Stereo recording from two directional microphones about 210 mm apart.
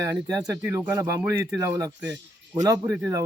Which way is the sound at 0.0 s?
15° right (ahead or behind).